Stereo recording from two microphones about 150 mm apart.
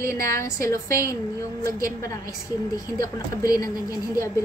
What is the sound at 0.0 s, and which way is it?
A woman's voice, 20° left (ahead or behind).